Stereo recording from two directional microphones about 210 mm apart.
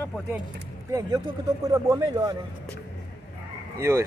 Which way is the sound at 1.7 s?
15° right (ahead or behind).